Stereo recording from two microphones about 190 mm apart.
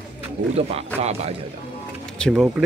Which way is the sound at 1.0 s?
35° right (ahead or behind).